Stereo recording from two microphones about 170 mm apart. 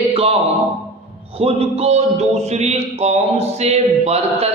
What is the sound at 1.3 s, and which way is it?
A man's voice, 35° right (ahead or behind).